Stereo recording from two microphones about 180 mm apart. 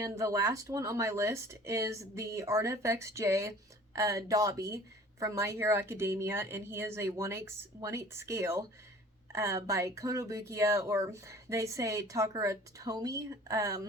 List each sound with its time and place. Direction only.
0.0 s speech: 15° right (ahead or behind)